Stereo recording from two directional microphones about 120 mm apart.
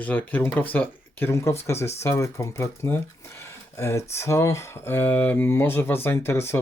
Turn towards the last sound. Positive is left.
turn(degrees=20)  # may be behind; listen again after turning